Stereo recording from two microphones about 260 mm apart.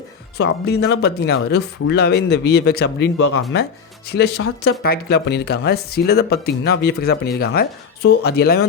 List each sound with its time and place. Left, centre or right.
0.3 s speech: left